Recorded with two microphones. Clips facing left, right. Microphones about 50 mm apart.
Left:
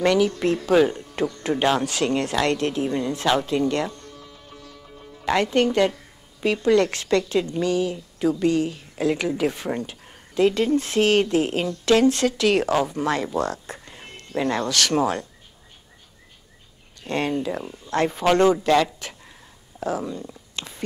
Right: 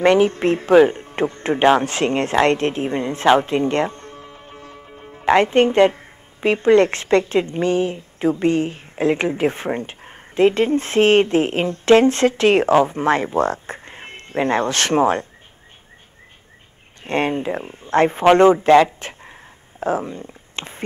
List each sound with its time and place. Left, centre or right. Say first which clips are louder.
0.0 s speech: right 5 dB; right
17.0 s speech: right 4 dB; right